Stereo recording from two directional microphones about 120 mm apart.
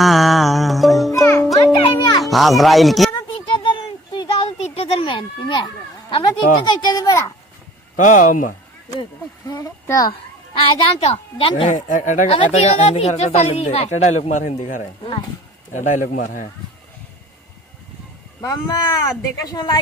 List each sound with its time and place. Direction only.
0.0 s music: centre (ahead or behind)
1.2 s music: 20° left (ahead or behind)
1.7 s music: 40° left (ahead or behind)
2.2 s a man's voice: centre (ahead or behind)
3.2 s a sound: 40° left (ahead or behind)
4.4 s children playing: 55° left (ahead or behind)
6.1 s speech: 40° left (ahead or behind)
7.9 s speech: 90° left
9.5 s a child's voice: 30° left (ahead or behind)
10.1 s a woman's voice: 45° left (ahead or behind)
11.7 s speech: 90° left
12.5 s speech: 65° left (ahead or behind); by 14.8 s 80° left
15.7 s speech: 90° left
18.4 s speech: 30° left (ahead or behind)